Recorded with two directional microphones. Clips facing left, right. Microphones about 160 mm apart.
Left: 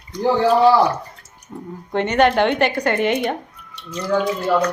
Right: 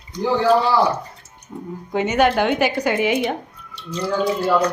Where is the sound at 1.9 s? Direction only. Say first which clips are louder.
Left 1 dB; 5° right (ahead or behind).